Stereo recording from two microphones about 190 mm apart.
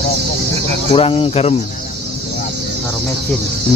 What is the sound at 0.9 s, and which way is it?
Speech, 30° left (ahead or behind).